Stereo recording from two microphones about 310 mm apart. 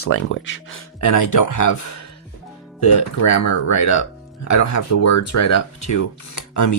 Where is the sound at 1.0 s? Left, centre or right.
Left.